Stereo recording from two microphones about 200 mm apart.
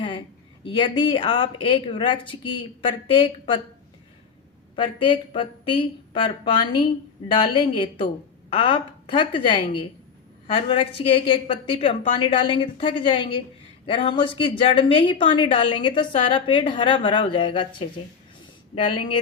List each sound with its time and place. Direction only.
0.6 s a woman's voice: 25° left (ahead or behind)
4.7 s a woman's voice: 25° left (ahead or behind)